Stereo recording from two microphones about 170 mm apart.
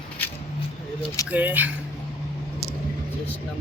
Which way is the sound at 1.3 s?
10° right (ahead or behind).